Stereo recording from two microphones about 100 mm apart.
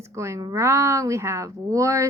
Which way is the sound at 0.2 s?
30° right (ahead or behind).